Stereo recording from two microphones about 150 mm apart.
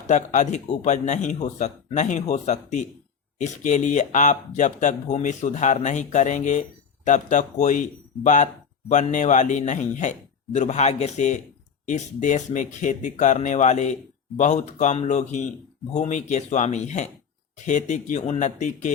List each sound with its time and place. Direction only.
0.1 s speech: 55° left (ahead or behind)